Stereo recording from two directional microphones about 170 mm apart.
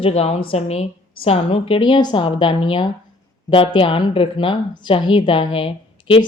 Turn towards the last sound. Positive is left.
turn(degrees=30)  # may be behind; listen again after turning